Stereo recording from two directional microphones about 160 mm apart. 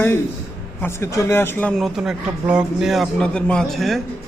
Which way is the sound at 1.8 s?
5° right (ahead or behind).